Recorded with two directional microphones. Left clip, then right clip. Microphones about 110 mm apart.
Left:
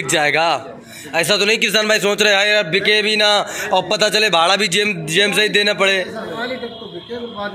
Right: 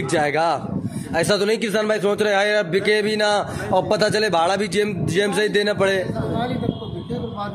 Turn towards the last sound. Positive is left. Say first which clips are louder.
# left 4 dB
turn(degrees=-35)  # may be behind; listen again after turning